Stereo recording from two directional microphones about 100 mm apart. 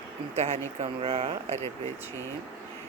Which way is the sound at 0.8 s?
75° right (ahead or behind).